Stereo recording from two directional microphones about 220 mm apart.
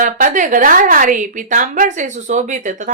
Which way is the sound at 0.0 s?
35° right (ahead or behind).